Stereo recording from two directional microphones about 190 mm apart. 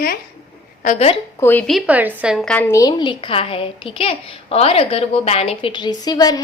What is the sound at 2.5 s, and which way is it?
A woman's voice, 15° left (ahead or behind).